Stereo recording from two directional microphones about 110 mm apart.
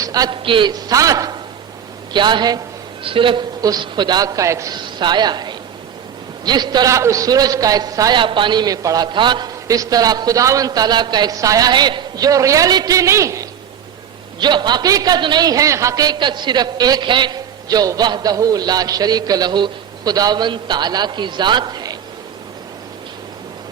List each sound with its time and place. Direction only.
0.0 s a sound: 35° right (ahead or behind)
0.4 s a man's voice: 50° right (ahead or behind); by 1.4 s 35° right (ahead or behind)
2.1 s a man's voice: 45° right (ahead or behind)
3.0 s a man's voice: 50° right (ahead or behind)
3.6 s a man's voice: 40° right (ahead or behind)
4.9 s a man's voice: 40° right (ahead or behind)
8.2 s a man's voice: 45° right (ahead or behind)
9.1 s a man's voice: 45° right (ahead or behind); by 13.5 s 30° right (ahead or behind)
14.3 s a man's voice: 40° right (ahead or behind)
16.1 s a man's voice: 45° right (ahead or behind)